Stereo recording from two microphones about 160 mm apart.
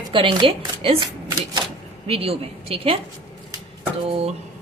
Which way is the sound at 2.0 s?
40° right (ahead or behind).